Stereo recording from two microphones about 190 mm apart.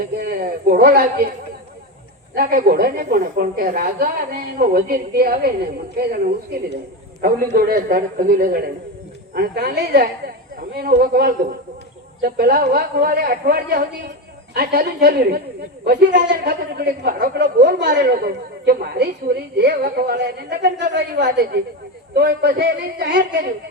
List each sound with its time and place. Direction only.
0.2 s a woman's voice: 50° right (ahead or behind)
2.3 s a woman's voice: 50° right (ahead or behind)
15.9 s a woman's voice: 45° right (ahead or behind); by 23.5 s 65° right (ahead or behind)